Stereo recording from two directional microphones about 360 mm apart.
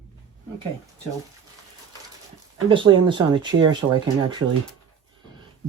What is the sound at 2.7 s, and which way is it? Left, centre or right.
Speech, centre.